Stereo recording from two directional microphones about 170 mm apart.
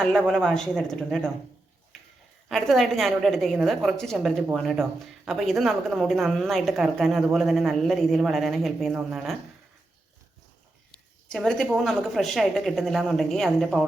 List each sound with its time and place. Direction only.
0.3 s a woman's voice: 5° left (ahead or behind)
2.5 s a woman's voice: centre (ahead or behind)
11.3 s a woman's voice: 5° left (ahead or behind)